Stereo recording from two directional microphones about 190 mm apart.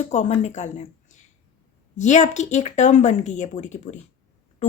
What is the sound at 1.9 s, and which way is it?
A woman's voice, 40° left (ahead or behind).